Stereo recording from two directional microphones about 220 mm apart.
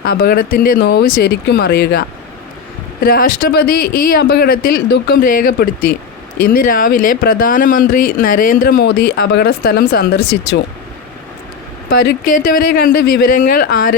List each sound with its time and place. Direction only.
0.0 s speech: 45° left (ahead or behind)
11.9 s speech: 50° left (ahead or behind)